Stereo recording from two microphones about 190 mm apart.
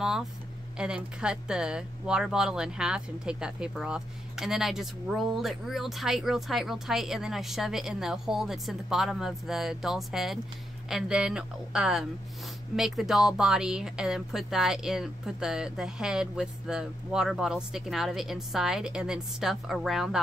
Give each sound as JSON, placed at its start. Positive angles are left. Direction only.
{"t": 0.0, "sound": "speech", "side_deg": -5}